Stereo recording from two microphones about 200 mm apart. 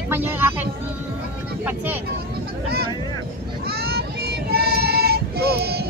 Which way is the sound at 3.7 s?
50° right (ahead or behind).